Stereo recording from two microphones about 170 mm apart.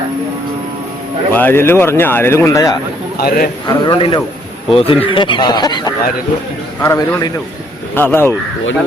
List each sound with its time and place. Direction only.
1.3 s a man's voice: 10° left (ahead or behind)
3.2 s a man's voice: 60° left (ahead or behind)
3.7 s a man's voice: 25° left (ahead or behind)